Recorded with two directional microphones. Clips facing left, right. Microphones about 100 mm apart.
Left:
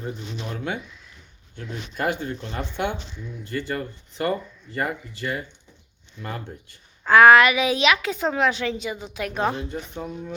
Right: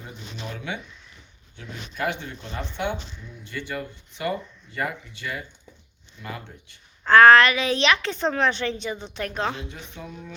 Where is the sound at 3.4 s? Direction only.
40° left (ahead or behind).